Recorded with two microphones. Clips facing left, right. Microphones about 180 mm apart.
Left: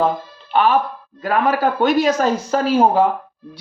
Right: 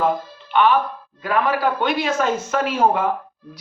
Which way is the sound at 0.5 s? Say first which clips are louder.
Left 1 dB; 40° left (ahead or behind).